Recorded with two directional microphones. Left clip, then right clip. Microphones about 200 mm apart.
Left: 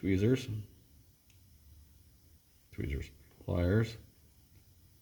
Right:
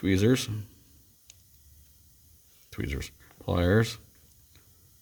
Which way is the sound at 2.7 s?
55° right (ahead or behind).